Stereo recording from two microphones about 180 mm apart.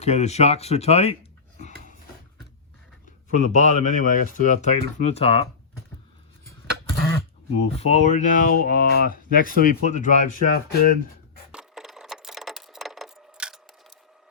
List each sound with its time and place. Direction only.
0.0 s speech: 40° left (ahead or behind)
3.3 s speech: 40° left (ahead or behind)
7.6 s speech: 35° left (ahead or behind)
11.5 s a sound: centre (ahead or behind)